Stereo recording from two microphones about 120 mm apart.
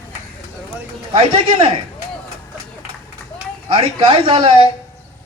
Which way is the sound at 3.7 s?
45° right (ahead or behind).